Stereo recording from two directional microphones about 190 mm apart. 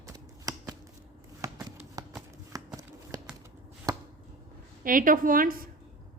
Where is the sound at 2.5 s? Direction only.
20° right (ahead or behind).